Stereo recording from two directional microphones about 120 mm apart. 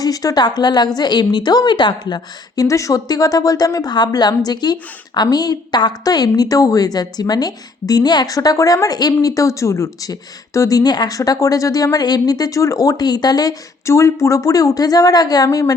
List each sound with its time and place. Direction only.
0.0 s a woman's voice: 30° left (ahead or behind)